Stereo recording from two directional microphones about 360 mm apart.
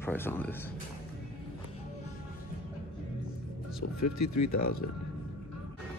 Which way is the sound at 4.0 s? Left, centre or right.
Left.